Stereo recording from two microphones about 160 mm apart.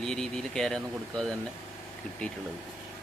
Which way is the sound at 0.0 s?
5° left (ahead or behind).